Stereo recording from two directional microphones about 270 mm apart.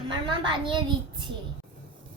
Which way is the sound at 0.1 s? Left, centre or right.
Centre.